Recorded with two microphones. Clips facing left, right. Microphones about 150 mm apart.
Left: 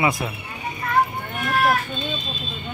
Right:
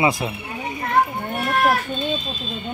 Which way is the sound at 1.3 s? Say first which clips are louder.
Right 1 dB; 35° right (ahead or behind).